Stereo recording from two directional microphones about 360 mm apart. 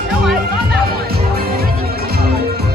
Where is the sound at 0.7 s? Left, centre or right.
Right.